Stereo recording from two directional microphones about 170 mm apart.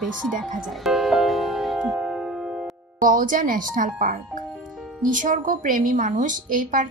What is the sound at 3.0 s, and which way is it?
A woman's voice, 50° right (ahead or behind).